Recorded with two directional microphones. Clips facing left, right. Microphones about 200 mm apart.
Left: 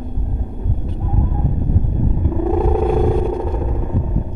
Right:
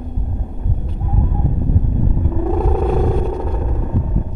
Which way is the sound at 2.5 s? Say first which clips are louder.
Left 2 dB; 5° left (ahead or behind).